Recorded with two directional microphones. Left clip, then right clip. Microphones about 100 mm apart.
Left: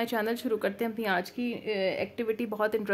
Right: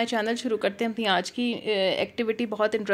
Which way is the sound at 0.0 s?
15° right (ahead or behind).